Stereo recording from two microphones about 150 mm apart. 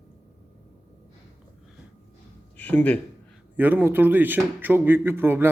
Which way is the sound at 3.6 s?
10° right (ahead or behind).